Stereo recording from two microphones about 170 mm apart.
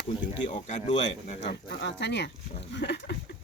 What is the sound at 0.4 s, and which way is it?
Speech, 40° left (ahead or behind).